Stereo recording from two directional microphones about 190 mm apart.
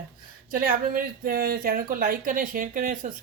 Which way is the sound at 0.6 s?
45° right (ahead or behind).